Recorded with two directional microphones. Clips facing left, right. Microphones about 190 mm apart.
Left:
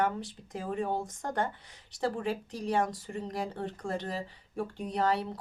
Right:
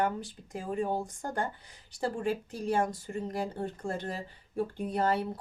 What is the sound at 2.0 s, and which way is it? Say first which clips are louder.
Speech: even; centre (ahead or behind).